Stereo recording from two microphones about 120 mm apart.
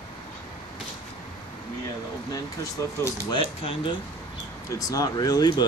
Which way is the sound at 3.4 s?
50° left (ahead or behind).